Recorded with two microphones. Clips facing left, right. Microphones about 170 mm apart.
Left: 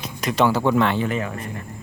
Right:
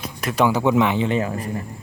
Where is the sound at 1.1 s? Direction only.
30° right (ahead or behind).